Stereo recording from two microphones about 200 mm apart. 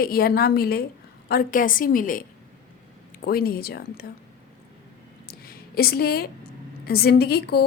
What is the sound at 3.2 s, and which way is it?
Speech, 50° left (ahead or behind).